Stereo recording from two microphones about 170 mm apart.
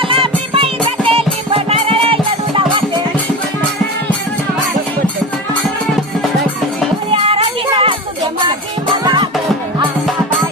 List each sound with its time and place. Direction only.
0.5 s music: 30° right (ahead or behind)
7.1 s music: 35° right (ahead or behind)
9.0 s music: 25° right (ahead or behind)